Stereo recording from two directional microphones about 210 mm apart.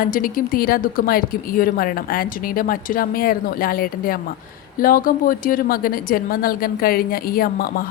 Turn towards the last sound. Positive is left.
turn(degrees=45)  # may be behind; listen again after turning